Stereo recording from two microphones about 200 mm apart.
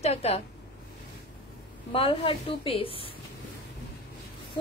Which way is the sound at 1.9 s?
30° left (ahead or behind).